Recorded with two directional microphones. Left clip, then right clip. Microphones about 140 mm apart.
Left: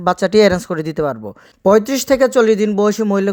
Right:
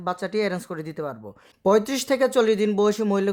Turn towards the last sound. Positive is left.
turn(degrees=35)  # may be behind; listen again after turning